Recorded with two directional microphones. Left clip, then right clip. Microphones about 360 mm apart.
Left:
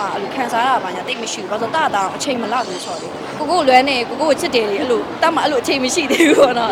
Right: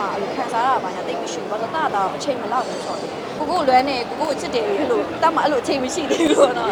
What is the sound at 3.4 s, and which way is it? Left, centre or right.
A woman's voice, centre.